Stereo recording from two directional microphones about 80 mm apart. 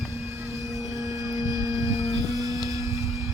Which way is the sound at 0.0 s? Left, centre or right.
Right.